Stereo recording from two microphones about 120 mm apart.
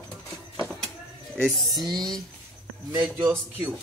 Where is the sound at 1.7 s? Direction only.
35° right (ahead or behind).